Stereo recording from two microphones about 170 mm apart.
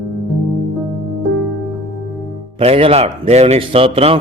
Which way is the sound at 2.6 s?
35° right (ahead or behind).